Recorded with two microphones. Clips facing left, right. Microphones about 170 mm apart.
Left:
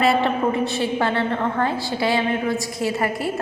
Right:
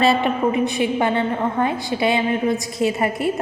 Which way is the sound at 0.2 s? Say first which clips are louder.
Right 1 dB; 15° right (ahead or behind).